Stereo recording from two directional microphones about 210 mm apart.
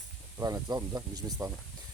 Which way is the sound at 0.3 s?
20° right (ahead or behind).